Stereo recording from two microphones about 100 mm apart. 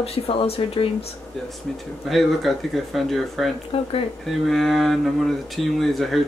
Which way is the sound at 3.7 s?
70° left (ahead or behind).